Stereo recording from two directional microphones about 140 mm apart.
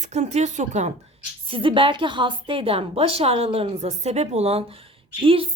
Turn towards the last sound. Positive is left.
turn(degrees=-40)  # may be behind; listen again after turning